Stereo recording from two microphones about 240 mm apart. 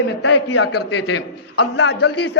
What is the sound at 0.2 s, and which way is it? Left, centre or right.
Speech, left.